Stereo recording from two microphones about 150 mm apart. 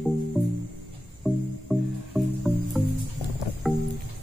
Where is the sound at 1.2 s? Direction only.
Centre (ahead or behind).